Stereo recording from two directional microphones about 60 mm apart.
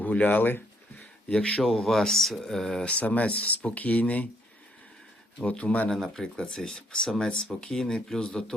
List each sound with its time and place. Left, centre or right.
0.0 s a sound: left
1.3 s speech: centre
1.6 s speech: centre
2.8 s speech: left
5.4 s speech: centre
5.9 s speech: centre